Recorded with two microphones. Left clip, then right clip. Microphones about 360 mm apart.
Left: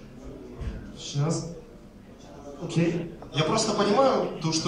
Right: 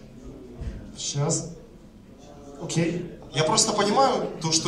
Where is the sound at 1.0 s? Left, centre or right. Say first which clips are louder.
Right 3 dB; right.